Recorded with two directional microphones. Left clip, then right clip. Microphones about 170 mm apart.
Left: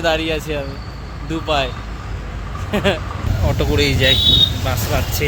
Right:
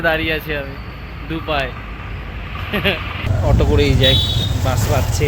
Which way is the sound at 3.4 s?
15° right (ahead or behind).